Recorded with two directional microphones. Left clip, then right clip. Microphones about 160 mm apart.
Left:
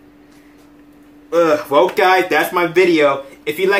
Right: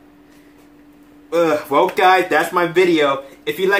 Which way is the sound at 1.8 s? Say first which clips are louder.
Even; 5° left (ahead or behind).